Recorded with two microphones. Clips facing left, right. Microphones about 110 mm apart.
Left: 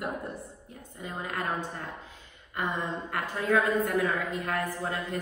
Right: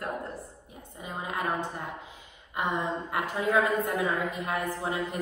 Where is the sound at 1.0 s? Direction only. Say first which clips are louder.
Right 1 dB; 20° right (ahead or behind).